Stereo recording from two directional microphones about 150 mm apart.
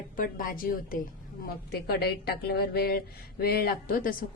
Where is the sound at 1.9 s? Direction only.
90° left.